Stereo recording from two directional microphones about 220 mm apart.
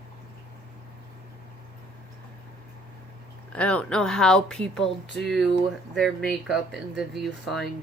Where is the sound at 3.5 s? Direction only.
5° left (ahead or behind).